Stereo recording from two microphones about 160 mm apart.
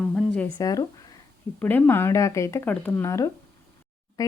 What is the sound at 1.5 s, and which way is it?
Speech, 10° left (ahead or behind).